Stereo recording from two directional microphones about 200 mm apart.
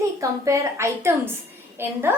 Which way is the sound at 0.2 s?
15° right (ahead or behind).